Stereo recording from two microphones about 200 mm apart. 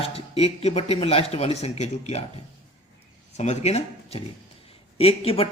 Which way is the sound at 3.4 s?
35° left (ahead or behind).